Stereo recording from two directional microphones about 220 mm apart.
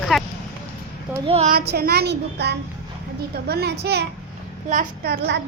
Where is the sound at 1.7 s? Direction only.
45° right (ahead or behind).